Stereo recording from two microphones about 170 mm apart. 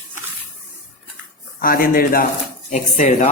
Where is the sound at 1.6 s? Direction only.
60° left (ahead or behind).